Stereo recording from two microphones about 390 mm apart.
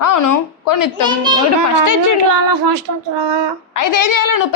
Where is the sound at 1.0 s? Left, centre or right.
Centre.